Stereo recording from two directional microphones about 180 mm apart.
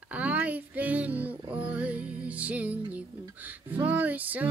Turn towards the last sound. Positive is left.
turn(degrees=-10)  # may be behind; listen again after turning